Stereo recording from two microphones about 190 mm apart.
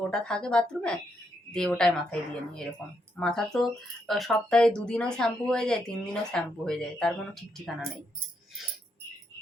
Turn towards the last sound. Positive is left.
turn(degrees=5)  # may be behind; listen again after turning